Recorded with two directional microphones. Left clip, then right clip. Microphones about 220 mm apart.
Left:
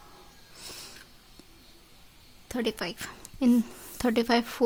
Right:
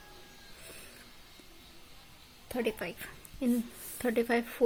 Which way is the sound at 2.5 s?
50° left (ahead or behind).